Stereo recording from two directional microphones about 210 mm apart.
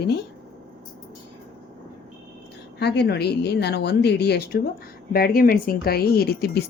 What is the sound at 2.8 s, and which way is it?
A woman's voice, 50° left (ahead or behind).